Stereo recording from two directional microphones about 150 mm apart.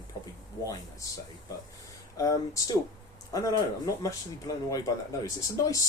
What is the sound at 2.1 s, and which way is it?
Speech, 20° left (ahead or behind).